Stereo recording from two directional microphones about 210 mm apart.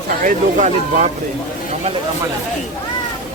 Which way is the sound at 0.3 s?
40° right (ahead or behind).